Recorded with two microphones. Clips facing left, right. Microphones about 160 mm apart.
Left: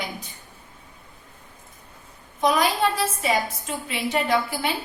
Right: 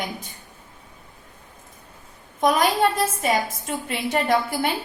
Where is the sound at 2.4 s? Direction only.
50° right (ahead or behind).